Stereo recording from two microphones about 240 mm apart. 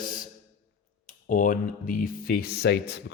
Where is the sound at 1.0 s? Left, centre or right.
Left.